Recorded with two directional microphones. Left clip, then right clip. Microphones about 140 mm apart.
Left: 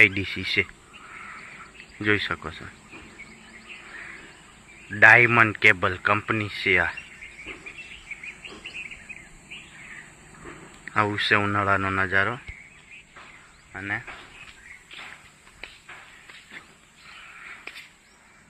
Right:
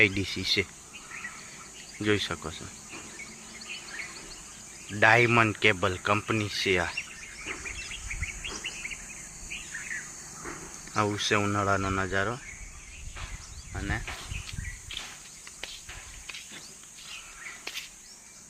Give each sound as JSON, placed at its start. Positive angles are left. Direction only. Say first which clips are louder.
{"t": 0.0, "sound": "speech", "louder": "left 5 dB", "side_deg": -15}
{"t": 2.0, "sound": "speech", "louder": "left 4 dB", "side_deg": -15}
{"t": 4.9, "sound": "speech", "louder": "left 7 dB", "side_deg": -15}
{"t": 10.9, "sound": "speech", "louder": "left 5 dB", "side_deg": -10}
{"t": 13.7, "sound": "speech", "louder": "left 5 dB", "side_deg": -25}